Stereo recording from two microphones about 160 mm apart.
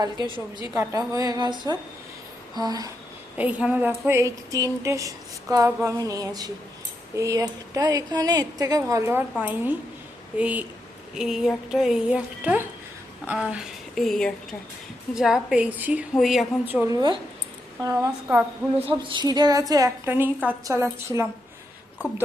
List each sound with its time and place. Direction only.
0.6 s speech: 20° right (ahead or behind)
3.3 s a woman's voice: 10° right (ahead or behind)
16.6 s a woman's voice: 10° right (ahead or behind)
16.9 s a woman's voice: 25° right (ahead or behind)
18.9 s a woman's voice: 30° right (ahead or behind)